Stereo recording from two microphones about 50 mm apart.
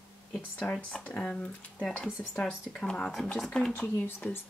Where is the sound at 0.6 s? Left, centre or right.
Left.